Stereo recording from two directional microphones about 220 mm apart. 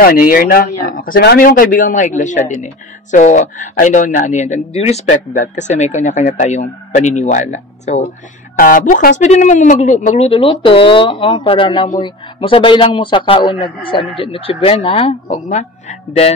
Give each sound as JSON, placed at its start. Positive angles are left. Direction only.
{"t": 0.0, "sound": "a man's voice", "side_deg": 40}